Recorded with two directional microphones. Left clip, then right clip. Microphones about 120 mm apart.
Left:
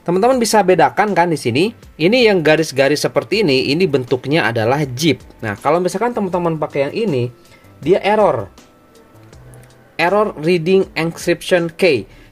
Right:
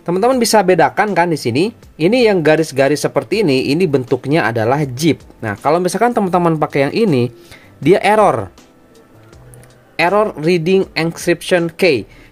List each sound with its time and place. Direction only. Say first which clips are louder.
0.0 s speech: even; centre (ahead or behind)
0.4 s speech: right 1 dB; 25° right (ahead or behind)
0.7 s speech: even; 10° right (ahead or behind); by 6.0 s 30° right (ahead or behind)
6.1 s speech: right 4 dB; 85° right
7.8 s speech: right 2 dB; 65° right (ahead or behind)
9.9 s speech: right 1 dB; 25° right (ahead or behind)